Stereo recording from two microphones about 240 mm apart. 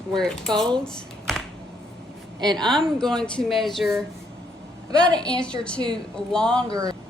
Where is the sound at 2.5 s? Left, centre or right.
Centre.